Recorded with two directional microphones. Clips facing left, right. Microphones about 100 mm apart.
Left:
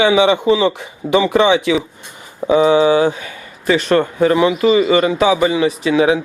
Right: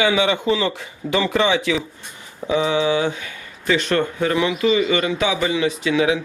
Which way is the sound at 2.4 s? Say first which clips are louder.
Left 7 dB; 40° left (ahead or behind).